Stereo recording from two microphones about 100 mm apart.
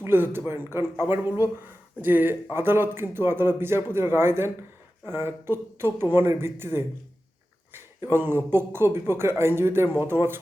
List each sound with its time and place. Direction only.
0.0 s speech: 20° right (ahead or behind)
8.1 s speech: 20° right (ahead or behind)